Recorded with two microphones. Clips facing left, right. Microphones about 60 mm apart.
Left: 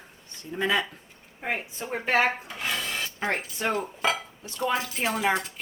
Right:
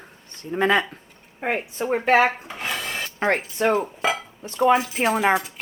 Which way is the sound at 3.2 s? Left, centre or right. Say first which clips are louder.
Right 8 dB; right.